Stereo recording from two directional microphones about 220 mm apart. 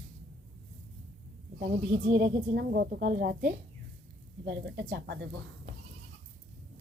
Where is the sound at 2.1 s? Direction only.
45° right (ahead or behind).